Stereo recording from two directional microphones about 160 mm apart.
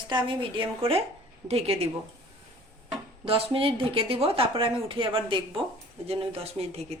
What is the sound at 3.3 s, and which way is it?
Speech, 35° right (ahead or behind).